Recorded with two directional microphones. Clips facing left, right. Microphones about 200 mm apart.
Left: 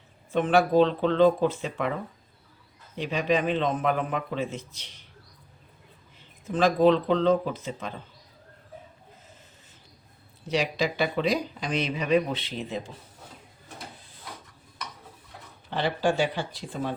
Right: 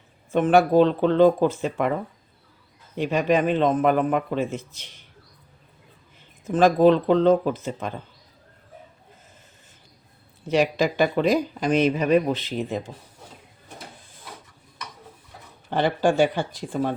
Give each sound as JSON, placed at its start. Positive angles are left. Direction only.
{"t": 0.3, "sound": "speech", "side_deg": -50}
{"t": 3.0, "sound": "speech", "side_deg": -50}
{"t": 6.5, "sound": "speech", "side_deg": -45}
{"t": 10.5, "sound": "speech", "side_deg": -50}
{"t": 15.7, "sound": "speech", "side_deg": -50}